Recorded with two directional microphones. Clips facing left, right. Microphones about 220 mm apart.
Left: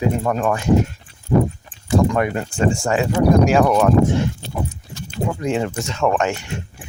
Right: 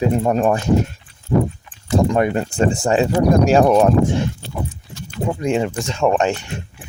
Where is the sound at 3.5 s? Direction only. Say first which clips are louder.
Right 3 dB; 30° right (ahead or behind).